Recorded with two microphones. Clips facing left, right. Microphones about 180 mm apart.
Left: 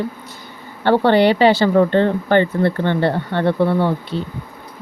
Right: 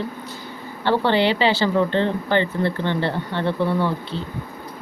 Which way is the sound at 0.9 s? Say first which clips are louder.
Left 5 dB; 50° left (ahead or behind).